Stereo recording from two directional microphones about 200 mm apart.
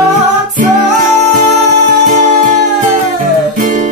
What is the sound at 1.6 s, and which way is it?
Music, 40° right (ahead or behind).